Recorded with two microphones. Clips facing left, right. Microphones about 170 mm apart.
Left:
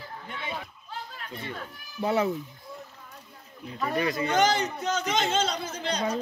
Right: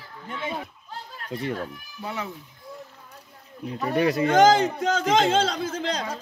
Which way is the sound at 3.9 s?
65° right (ahead or behind).